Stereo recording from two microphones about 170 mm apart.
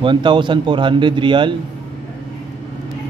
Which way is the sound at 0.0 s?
30° right (ahead or behind).